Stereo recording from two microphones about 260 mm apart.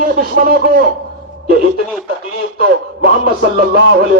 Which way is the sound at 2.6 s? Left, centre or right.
Right.